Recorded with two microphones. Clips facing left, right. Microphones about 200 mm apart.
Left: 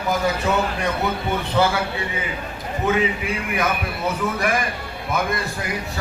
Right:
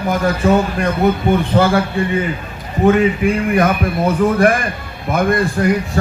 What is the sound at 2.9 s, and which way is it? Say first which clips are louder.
A man's voice: right 9 dB; 50° right (ahead or behind).